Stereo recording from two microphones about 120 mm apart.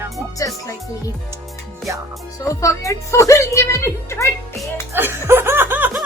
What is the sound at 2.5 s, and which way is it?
A woman's voice, 25° left (ahead or behind).